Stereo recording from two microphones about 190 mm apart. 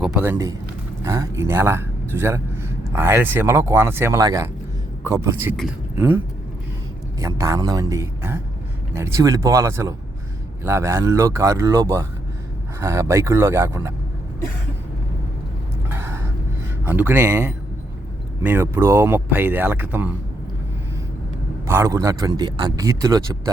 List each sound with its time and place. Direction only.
0.0 s speech: 10° right (ahead or behind)
15.9 s a sound: 10° right (ahead or behind)
16.8 s speech: 10° right (ahead or behind)
21.7 s speech: 15° right (ahead or behind)